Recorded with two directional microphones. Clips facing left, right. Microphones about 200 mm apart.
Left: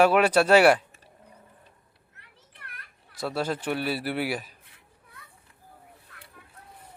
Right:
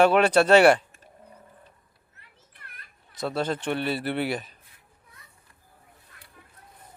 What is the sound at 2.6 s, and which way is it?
Children playing, 70° left (ahead or behind).